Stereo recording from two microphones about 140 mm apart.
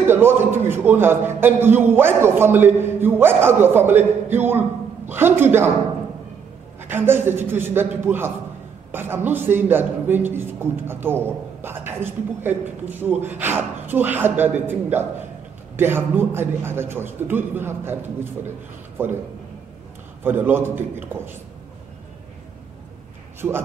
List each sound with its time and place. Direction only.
0.0 s a man's voice: 15° right (ahead or behind)
6.8 s a man's voice: 15° right (ahead or behind)
20.2 s a man's voice: 15° right (ahead or behind)